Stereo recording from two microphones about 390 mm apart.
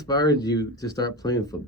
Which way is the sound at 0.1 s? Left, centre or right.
Centre.